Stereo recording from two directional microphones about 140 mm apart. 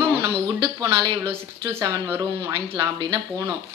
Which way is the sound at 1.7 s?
15° right (ahead or behind).